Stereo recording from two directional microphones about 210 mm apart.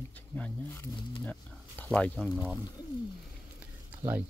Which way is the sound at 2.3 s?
5° right (ahead or behind).